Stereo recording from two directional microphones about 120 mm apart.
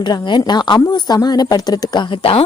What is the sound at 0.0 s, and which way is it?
A woman's voice, 40° left (ahead or behind).